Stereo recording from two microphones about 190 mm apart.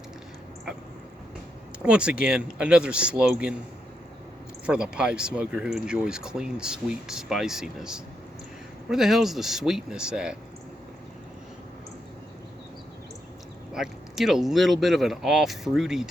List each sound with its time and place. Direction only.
1.8 s speech: 5° right (ahead or behind)
4.6 s speech: 5° right (ahead or behind)
13.7 s speech: 5° right (ahead or behind)